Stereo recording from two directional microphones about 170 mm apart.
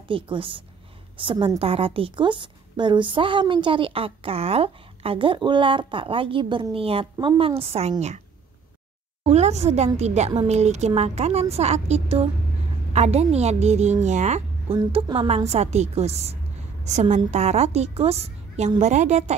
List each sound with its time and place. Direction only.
0.1 s a woman's voice: 30° right (ahead or behind)
9.2 s a woman's voice: 40° right (ahead or behind)